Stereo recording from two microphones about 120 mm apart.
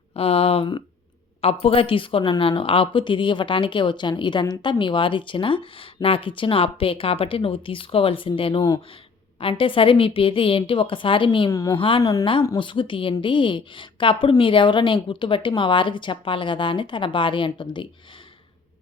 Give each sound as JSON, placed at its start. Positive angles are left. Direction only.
{"t": 0.1, "sound": "a woman's voice", "side_deg": 55}
{"t": 11.5, "sound": "a woman's voice", "side_deg": 30}
{"t": 11.8, "sound": "a woman's voice", "side_deg": 45}